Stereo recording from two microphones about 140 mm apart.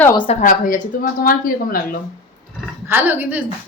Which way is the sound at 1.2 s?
90° left.